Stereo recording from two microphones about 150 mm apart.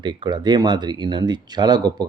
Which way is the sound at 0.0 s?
30° right (ahead or behind).